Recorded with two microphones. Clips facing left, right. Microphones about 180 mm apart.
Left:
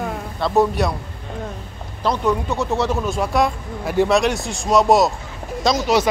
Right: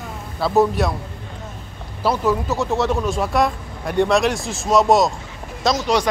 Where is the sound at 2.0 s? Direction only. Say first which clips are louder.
Even; 5° right (ahead or behind).